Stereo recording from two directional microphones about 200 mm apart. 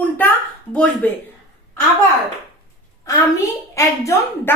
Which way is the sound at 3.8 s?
15° left (ahead or behind).